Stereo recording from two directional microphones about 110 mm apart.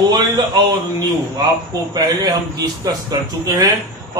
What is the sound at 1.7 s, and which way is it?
Speech, 35° right (ahead or behind).